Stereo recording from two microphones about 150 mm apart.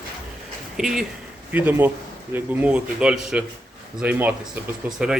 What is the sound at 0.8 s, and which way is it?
Speech, centre (ahead or behind).